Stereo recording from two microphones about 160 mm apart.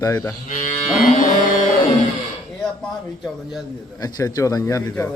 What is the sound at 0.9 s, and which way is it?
Music, 55° left (ahead or behind).